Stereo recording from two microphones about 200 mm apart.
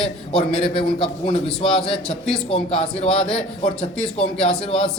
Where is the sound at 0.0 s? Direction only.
30° left (ahead or behind).